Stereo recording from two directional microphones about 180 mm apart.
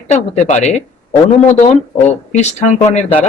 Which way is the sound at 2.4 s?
40° left (ahead or behind).